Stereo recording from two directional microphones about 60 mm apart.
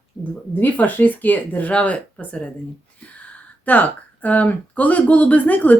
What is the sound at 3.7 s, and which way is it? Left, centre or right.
Speech, left.